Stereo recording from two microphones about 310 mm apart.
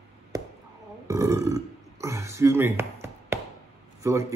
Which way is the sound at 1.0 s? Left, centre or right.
Centre.